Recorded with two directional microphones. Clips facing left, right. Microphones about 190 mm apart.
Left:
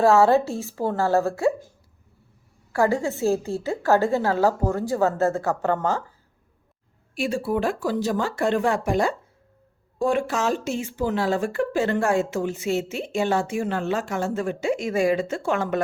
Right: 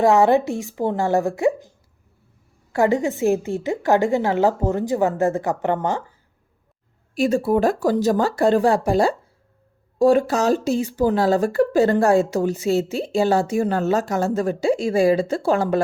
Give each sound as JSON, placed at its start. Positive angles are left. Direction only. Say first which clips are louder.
{"t": 0.0, "sound": "a woman's voice", "louder": "right 1 dB", "side_deg": -15}
{"t": 2.7, "sound": "a woman's voice", "louder": "right 3 dB", "side_deg": -20}
{"t": 7.2, "sound": "speech", "louder": "right 6 dB", "side_deg": -40}